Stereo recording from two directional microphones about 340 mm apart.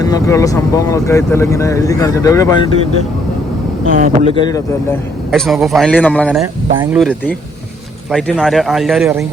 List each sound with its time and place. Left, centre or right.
0.0 s speech: centre
3.9 s speech: right
4.4 s a man's voice: centre